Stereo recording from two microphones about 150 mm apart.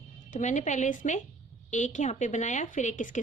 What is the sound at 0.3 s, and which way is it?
A woman's voice, 55° left (ahead or behind).